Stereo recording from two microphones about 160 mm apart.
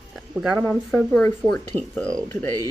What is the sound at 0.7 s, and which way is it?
Speech, 5° left (ahead or behind).